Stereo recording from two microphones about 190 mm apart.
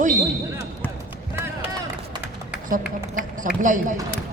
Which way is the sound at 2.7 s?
45° right (ahead or behind).